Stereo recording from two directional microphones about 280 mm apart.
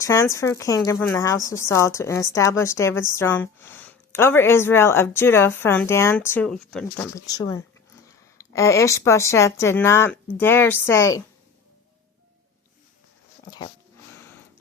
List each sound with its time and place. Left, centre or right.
0.0 s a woman's voice: centre